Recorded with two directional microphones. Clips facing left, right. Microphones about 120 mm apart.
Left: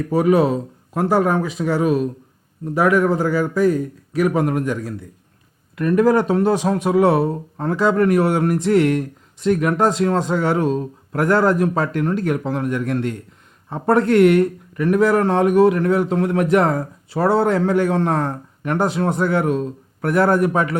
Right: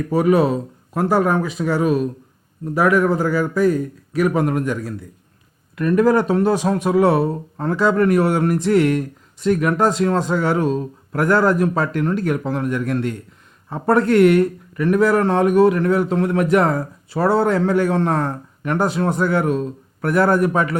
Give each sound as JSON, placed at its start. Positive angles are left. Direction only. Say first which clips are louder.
{"t": 0.1, "sound": "a man's voice", "louder": "even", "side_deg": 20}